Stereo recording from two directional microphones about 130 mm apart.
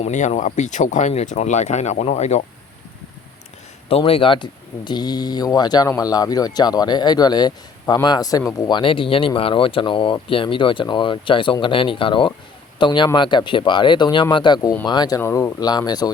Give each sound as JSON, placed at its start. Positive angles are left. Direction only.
{"t": 0.0, "sound": "speech", "side_deg": 65}
{"t": 3.8, "sound": "speech", "side_deg": 45}
{"t": 8.8, "sound": "speech", "side_deg": 45}
{"t": 15.2, "sound": "speech", "side_deg": 20}